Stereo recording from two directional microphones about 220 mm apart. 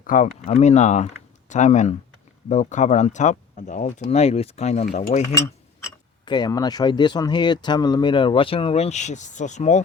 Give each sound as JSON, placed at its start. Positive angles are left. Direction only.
{"t": 0.0, "sound": "speech", "side_deg": 35}
{"t": 6.2, "sound": "speech", "side_deg": 20}